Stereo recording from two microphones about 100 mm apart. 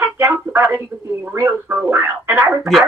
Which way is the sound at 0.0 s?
25° right (ahead or behind).